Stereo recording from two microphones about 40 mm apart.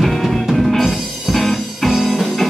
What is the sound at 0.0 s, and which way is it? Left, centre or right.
Music, centre.